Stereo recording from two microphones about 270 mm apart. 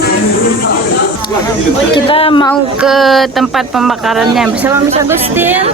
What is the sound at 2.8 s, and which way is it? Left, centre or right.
Speech, centre.